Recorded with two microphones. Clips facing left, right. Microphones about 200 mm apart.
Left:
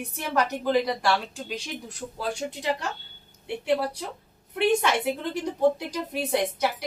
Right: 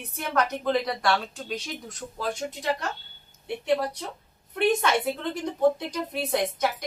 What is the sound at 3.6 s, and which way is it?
A woman's voice, 10° left (ahead or behind).